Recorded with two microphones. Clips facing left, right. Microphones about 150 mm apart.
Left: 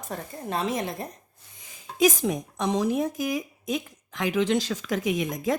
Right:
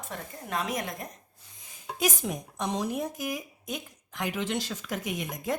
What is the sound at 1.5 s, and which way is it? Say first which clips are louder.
A woman's voice: left 9 dB; 90° left.